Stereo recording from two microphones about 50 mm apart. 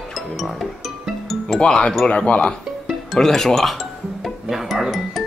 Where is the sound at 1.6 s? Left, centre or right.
Centre.